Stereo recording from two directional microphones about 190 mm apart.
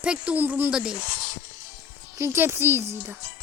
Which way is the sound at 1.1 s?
50° left (ahead or behind).